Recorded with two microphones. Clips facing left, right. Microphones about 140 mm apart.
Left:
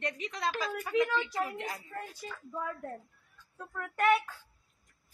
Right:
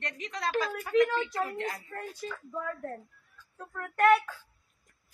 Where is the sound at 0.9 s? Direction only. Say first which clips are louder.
Right 4 dB; 10° left (ahead or behind).